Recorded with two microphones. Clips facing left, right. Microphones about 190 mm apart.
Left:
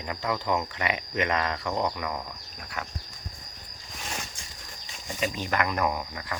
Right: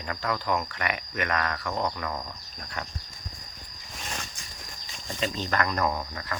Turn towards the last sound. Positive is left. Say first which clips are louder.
# even
turn(degrees=15)  # may be behind; listen again after turning